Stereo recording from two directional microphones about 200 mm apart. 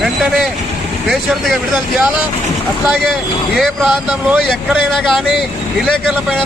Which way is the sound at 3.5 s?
Centre (ahead or behind).